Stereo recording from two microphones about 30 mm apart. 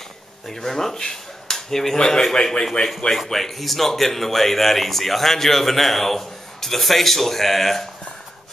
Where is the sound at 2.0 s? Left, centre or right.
Centre.